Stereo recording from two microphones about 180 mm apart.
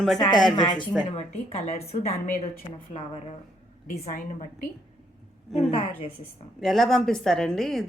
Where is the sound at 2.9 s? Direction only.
35° left (ahead or behind).